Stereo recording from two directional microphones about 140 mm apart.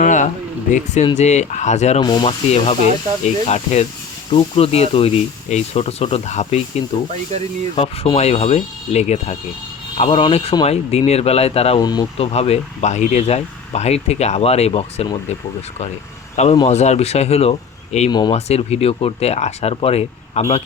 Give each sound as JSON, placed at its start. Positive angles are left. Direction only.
{"t": 0.0, "sound": "a sound", "side_deg": 60}
{"t": 0.7, "sound": "speech", "side_deg": 55}
{"t": 2.0, "sound": "speech", "side_deg": 30}
{"t": 3.2, "sound": "speech", "side_deg": 50}
{"t": 11.8, "sound": "speech", "side_deg": 30}
{"t": 12.1, "sound": "speech", "side_deg": 45}
{"t": 16.3, "sound": "speech", "side_deg": 50}
{"t": 18.1, "sound": "speech", "side_deg": 30}
{"t": 18.3, "sound": "speech", "side_deg": 50}